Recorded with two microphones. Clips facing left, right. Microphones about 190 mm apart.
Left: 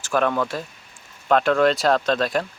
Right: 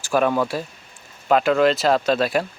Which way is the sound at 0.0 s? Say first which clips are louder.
Right 2 dB; 10° right (ahead or behind).